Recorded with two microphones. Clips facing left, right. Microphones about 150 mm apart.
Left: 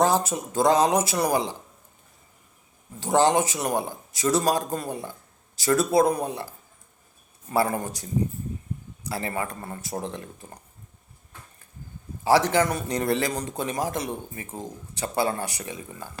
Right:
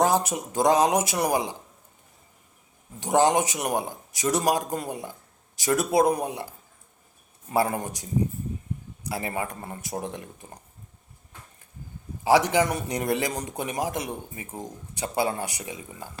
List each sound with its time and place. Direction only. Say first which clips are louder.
0.0 s speech: left 1 dB; 15° right (ahead or behind)
3.0 s speech: even; 15° right (ahead or behind)
7.5 s speech: left 1 dB; 15° right (ahead or behind)
12.2 s speech: even; 15° right (ahead or behind)